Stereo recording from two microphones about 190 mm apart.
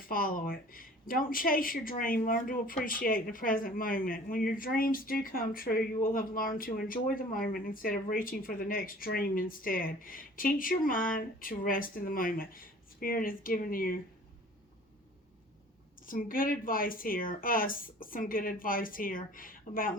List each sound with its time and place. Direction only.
0.0 s speech: 50° left (ahead or behind)
16.0 s speech: 45° left (ahead or behind)